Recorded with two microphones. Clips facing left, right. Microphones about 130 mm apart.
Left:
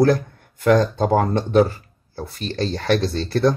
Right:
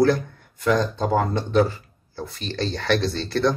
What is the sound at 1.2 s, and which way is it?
Speech, 50° left (ahead or behind).